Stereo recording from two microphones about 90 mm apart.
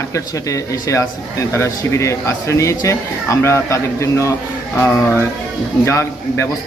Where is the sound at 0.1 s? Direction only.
35° left (ahead or behind).